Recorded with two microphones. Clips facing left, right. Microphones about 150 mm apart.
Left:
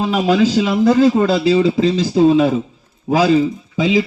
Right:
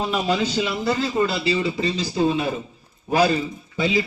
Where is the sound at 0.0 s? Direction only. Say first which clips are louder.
Left 8 dB; 90° left.